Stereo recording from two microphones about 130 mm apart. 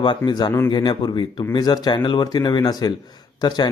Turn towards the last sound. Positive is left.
turn(degrees=35)  # may be behind; listen again after turning